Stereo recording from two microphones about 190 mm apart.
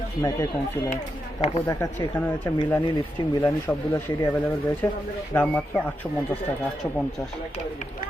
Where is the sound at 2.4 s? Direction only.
15° left (ahead or behind).